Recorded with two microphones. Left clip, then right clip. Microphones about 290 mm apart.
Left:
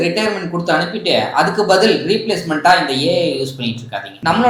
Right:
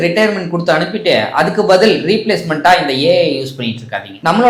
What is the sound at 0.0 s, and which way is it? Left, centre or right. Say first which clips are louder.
Speech: right 5 dB; right.